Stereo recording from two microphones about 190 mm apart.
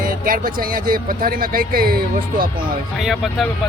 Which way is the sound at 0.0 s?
50° right (ahead or behind).